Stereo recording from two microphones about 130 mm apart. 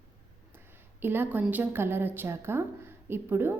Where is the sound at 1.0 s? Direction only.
15° right (ahead or behind).